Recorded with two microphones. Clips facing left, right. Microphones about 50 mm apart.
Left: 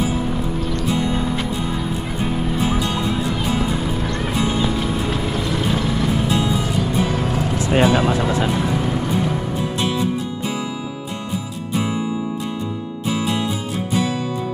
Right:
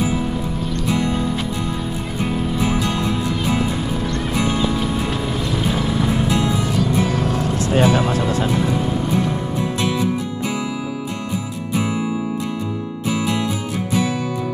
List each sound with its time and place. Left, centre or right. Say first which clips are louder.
4.4 s music: right 1 dB; centre
7.7 s music: left 1 dB; left